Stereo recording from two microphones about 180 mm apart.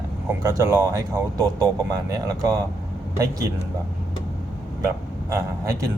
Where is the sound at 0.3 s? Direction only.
15° right (ahead or behind).